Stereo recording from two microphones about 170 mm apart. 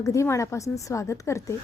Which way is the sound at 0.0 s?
15° left (ahead or behind).